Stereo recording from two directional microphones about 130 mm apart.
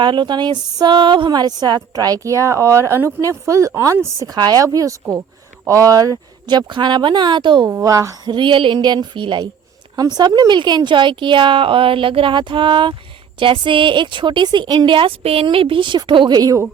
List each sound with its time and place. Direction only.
0.0 s speech: 35° right (ahead or behind)
7.7 s speech: 25° right (ahead or behind)
8.3 s speech: 40° right (ahead or behind)